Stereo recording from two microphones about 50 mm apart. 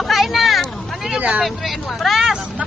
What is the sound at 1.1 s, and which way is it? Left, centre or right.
Speech, right.